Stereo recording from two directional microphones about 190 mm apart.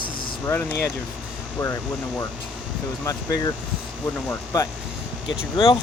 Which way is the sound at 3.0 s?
20° left (ahead or behind).